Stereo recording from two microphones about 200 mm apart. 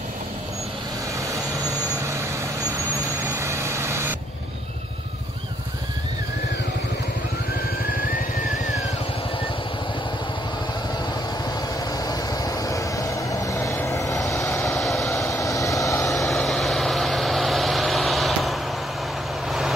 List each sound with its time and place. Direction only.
3.2 s vehicle: 15° right (ahead or behind)
11.4 s vehicle: 20° left (ahead or behind)
14.4 s vehicle: centre (ahead or behind)
15.3 s vehicle: 15° left (ahead or behind)
16.0 s vehicle: centre (ahead or behind)